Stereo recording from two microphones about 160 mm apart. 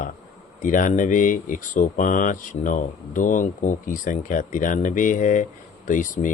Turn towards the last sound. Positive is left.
turn(degrees=55)  # may be behind; listen again after turning